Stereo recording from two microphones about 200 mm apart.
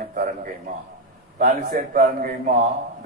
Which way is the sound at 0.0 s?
45° right (ahead or behind).